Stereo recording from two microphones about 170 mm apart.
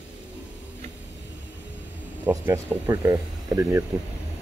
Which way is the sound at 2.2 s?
10° right (ahead or behind).